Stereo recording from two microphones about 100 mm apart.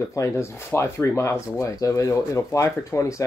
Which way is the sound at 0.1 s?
30° left (ahead or behind).